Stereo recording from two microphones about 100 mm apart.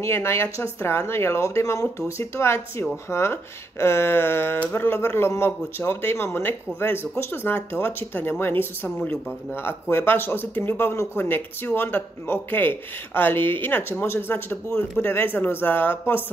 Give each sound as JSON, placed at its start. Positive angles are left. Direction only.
{"t": 0.0, "sound": "speech", "side_deg": 25}